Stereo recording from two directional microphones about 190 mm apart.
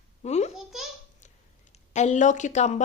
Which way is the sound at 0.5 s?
Centre (ahead or behind).